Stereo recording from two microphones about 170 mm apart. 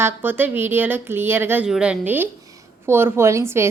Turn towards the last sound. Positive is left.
turn(degrees=-15)  # may be behind; listen again after turning